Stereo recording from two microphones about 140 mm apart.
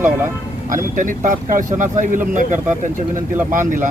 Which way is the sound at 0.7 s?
70° right (ahead or behind).